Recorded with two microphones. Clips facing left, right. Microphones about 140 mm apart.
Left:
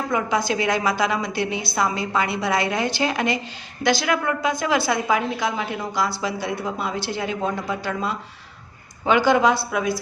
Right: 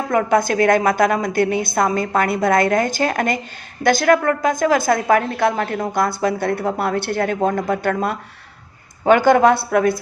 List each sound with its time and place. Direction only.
0.1 s a woman's voice: 55° right (ahead or behind)